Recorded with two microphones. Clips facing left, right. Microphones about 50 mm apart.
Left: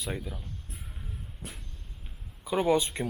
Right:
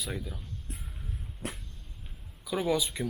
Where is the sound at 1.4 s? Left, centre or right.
Right.